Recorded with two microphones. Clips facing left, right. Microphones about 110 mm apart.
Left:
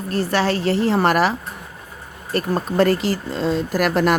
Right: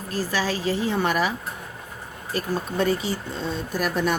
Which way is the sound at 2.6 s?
75° left (ahead or behind).